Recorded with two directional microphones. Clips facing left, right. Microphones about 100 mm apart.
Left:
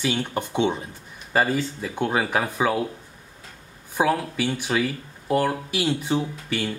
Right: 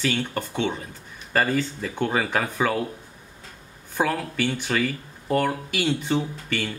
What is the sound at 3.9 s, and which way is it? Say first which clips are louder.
Speech: left 2 dB; 10° left (ahead or behind).